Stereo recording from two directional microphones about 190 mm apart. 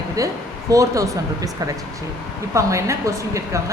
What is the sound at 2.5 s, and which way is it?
A woman's voice, 15° right (ahead or behind).